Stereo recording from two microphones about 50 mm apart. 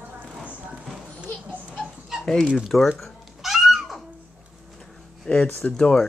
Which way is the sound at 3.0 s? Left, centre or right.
Centre.